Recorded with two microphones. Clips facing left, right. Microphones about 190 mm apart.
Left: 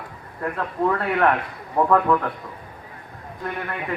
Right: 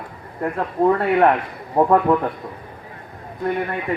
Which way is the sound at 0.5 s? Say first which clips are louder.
Right 5 dB; 30° right (ahead or behind).